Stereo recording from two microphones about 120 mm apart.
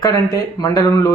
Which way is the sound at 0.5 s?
30° left (ahead or behind).